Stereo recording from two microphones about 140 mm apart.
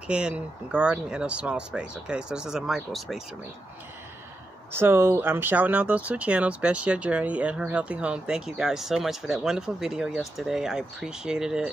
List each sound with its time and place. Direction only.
0.1 s speech: 5° right (ahead or behind)
4.7 s speech: 15° right (ahead or behind)